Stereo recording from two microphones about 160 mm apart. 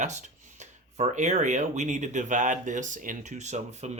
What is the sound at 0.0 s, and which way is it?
Speech, 50° right (ahead or behind).